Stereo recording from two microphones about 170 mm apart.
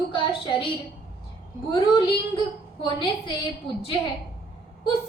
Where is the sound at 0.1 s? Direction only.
30° left (ahead or behind).